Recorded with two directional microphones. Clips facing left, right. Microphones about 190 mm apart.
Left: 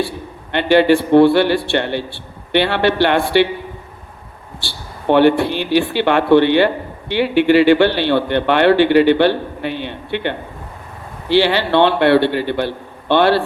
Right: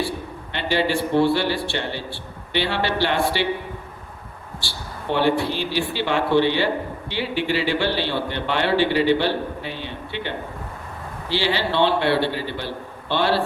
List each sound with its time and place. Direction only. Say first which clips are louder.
0.5 s a man's voice: left 10 dB; 60° left (ahead or behind)
4.6 s a man's voice: left 10 dB; 60° left (ahead or behind)